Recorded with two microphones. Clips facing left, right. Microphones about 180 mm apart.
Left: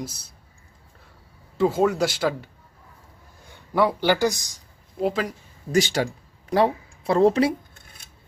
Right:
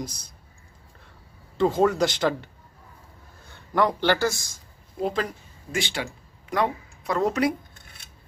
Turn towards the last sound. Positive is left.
turn(degrees=30)  # may be behind; listen again after turning